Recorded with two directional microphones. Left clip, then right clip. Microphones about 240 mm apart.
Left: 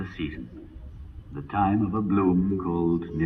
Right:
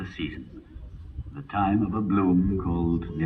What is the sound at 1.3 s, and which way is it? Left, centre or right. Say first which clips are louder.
A man's voice: left 1 dB; right.